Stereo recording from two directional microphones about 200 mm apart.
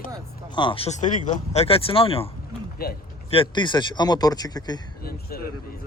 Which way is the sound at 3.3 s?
25° left (ahead or behind).